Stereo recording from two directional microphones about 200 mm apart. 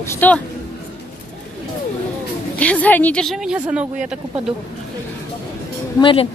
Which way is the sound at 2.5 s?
5° left (ahead or behind).